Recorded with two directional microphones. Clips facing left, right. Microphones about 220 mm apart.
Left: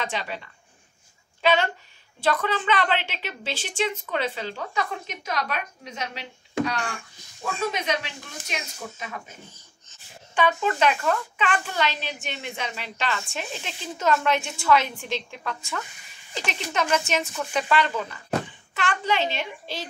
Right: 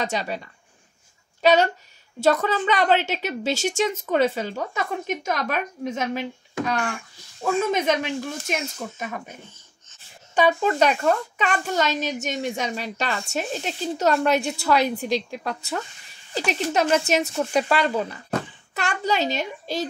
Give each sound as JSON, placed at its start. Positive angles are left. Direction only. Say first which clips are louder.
{"t": 0.0, "sound": "a woman's voice", "louder": "right 4 dB", "side_deg": -40}
{"t": 1.4, "sound": "a woman's voice", "louder": "right 4 dB", "side_deg": -40}
{"t": 7.7, "sound": "a woman's voice", "louder": "right 7 dB", "side_deg": -50}